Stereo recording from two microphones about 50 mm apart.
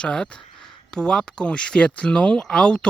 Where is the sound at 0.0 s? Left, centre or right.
Centre.